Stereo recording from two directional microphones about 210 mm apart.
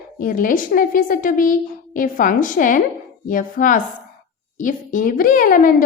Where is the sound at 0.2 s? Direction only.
40° left (ahead or behind).